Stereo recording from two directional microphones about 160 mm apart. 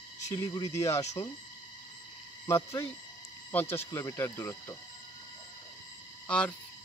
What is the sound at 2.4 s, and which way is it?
Speech, 15° left (ahead or behind).